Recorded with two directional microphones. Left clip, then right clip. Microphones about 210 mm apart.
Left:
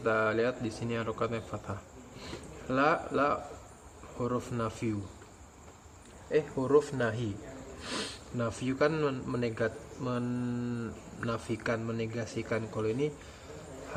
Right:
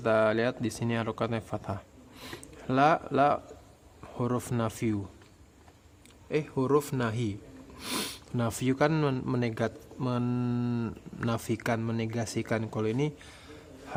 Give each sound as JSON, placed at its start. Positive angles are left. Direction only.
{"t": 0.0, "sound": "speech", "side_deg": -55}
{"t": 6.3, "sound": "speech", "side_deg": -55}